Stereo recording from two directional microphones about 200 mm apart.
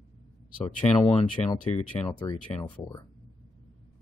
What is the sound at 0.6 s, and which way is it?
Speech, 25° left (ahead or behind).